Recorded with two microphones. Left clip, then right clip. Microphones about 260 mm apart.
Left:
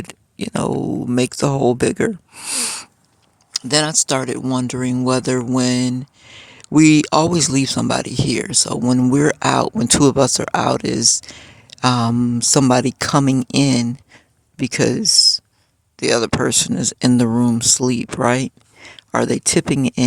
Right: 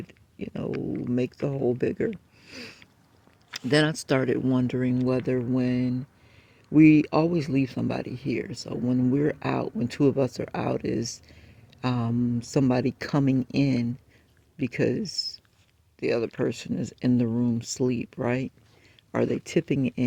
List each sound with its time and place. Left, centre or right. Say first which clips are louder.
0.1 s a sound: left 12 dB; left
1.1 s speech: left 11 dB; left
3.5 s speech: left 6 dB; centre